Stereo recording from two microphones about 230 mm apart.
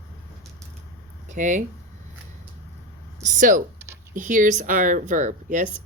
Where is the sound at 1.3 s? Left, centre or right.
Right.